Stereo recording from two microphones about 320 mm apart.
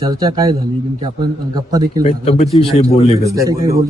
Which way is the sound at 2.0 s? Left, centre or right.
Centre.